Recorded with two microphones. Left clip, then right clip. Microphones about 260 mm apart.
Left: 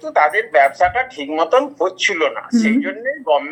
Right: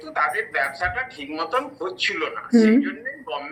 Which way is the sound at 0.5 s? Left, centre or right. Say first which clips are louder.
Left 10 dB; centre.